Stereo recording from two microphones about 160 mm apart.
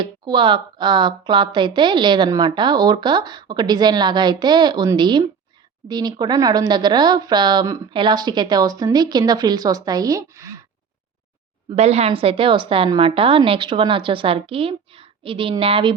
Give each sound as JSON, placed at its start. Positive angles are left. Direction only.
{"t": 0.0, "sound": "speech", "side_deg": -30}
{"t": 11.7, "sound": "a woman's voice", "side_deg": -40}